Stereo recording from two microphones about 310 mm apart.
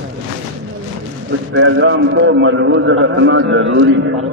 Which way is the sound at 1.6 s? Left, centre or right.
Right.